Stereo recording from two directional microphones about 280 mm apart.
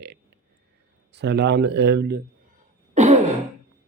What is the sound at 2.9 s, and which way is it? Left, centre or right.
Throat clearing, right.